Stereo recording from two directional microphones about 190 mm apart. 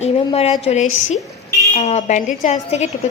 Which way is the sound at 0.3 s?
30° left (ahead or behind).